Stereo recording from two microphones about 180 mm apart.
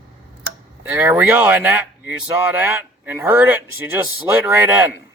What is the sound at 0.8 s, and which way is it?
Speech, 10° right (ahead or behind).